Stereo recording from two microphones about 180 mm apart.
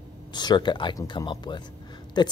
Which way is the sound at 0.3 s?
25° left (ahead or behind).